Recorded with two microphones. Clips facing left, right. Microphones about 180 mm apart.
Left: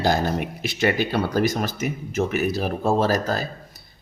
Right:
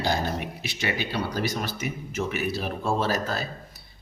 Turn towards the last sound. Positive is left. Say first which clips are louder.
# left 5 dB
turn(degrees=40)  # may be behind; listen again after turning